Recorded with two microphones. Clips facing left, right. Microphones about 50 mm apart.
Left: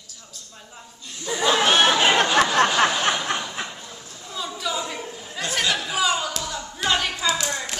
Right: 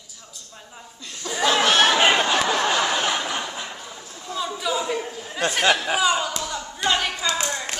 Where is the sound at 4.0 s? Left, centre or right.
Centre.